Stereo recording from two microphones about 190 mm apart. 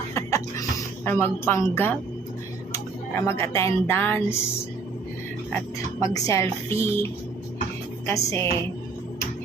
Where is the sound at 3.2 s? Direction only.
15° left (ahead or behind).